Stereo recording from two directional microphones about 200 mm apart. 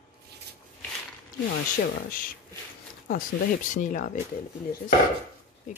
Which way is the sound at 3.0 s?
40° left (ahead or behind).